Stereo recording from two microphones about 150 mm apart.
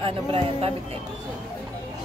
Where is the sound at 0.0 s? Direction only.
40° right (ahead or behind).